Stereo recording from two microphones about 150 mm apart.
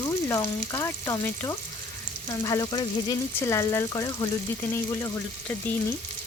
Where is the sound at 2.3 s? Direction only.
20° left (ahead or behind).